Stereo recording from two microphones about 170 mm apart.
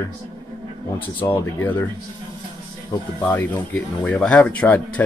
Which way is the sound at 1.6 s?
10° left (ahead or behind).